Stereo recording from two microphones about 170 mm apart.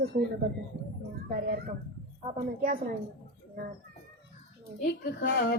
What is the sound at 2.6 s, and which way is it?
Speech, 60° right (ahead or behind).